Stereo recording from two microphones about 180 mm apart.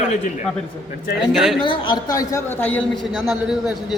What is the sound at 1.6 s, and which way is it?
Speech, 30° left (ahead or behind).